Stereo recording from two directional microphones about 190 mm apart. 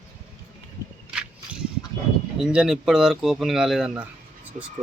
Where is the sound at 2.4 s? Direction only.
5° right (ahead or behind).